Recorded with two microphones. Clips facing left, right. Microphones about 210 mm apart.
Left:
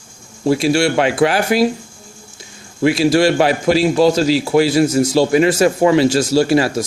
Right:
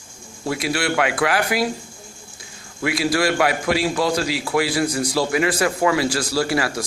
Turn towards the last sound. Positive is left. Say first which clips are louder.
# left 8 dB
turn(degrees=25)  # may be behind; listen again after turning